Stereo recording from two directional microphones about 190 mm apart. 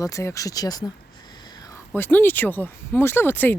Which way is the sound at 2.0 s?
10° left (ahead or behind).